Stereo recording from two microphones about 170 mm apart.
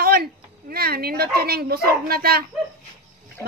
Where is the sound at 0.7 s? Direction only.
65° right (ahead or behind).